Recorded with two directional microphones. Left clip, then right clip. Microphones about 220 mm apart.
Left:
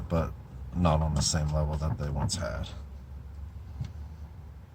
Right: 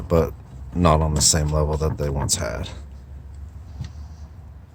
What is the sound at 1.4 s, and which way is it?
Speech, 50° right (ahead or behind).